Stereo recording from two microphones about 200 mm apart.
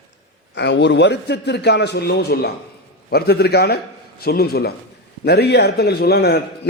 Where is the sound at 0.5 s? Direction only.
60° left (ahead or behind).